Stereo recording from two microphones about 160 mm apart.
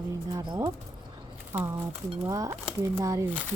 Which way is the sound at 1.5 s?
15° right (ahead or behind).